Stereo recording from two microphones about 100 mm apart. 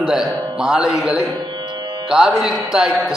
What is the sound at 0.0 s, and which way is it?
Speech, 5° right (ahead or behind).